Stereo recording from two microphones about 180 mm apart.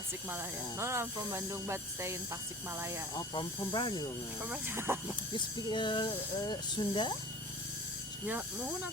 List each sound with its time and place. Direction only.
0.3 s speech: 15° right (ahead or behind)
3.2 s speech: 25° left (ahead or behind)
4.4 s speech: 10° right (ahead or behind)
5.5 s speech: 25° left (ahead or behind)